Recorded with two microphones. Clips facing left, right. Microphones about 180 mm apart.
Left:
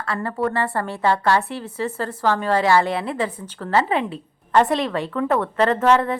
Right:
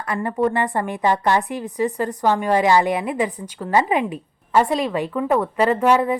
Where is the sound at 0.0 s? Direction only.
15° right (ahead or behind).